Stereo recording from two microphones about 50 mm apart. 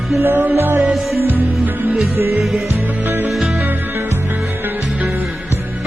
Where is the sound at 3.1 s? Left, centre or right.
Right.